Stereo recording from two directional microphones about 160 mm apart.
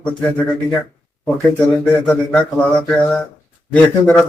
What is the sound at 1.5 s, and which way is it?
Mantra, 5° left (ahead or behind).